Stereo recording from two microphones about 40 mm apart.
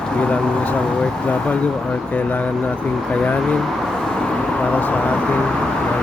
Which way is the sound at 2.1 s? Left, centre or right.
Left.